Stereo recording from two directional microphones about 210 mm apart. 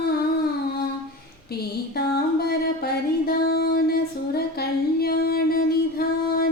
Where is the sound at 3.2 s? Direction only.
45° left (ahead or behind).